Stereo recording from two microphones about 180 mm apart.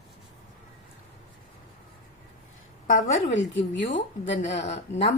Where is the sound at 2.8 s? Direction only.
50° left (ahead or behind).